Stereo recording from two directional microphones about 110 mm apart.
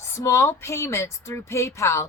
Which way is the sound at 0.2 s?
25° left (ahead or behind).